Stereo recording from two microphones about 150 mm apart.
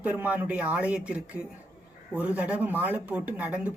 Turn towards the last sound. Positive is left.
turn(degrees=-10)  # may be behind; listen again after turning